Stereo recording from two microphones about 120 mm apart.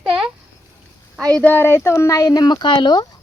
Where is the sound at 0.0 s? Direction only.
5° right (ahead or behind).